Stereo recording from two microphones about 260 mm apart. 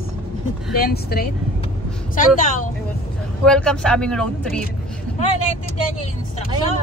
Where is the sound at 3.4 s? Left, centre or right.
Centre.